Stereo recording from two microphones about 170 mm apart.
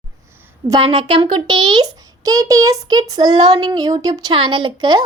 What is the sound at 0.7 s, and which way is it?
A child's voice, 30° right (ahead or behind).